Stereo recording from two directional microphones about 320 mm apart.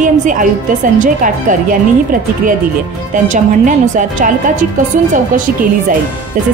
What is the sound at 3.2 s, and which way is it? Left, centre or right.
Speech, right.